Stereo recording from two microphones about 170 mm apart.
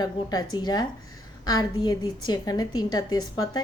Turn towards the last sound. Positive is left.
turn(degrees=25)  # may be behind; listen again after turning